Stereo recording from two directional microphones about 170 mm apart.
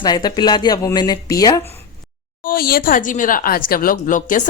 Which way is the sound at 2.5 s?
60° left (ahead or behind).